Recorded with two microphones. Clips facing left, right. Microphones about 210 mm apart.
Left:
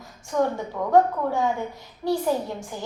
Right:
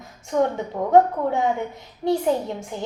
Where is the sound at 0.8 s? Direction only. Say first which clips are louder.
Right 4 dB; 40° right (ahead or behind).